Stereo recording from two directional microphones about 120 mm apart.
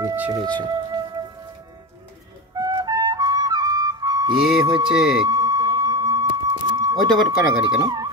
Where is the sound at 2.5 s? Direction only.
35° right (ahead or behind).